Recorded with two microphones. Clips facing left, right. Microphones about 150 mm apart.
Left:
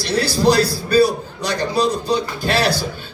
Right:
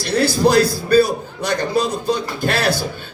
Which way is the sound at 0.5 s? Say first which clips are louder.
Right 2 dB; 50° right (ahead or behind).